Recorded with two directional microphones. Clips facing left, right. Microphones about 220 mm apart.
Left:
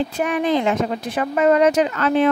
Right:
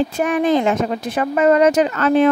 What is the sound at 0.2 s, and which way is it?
A woman's voice, 45° right (ahead or behind).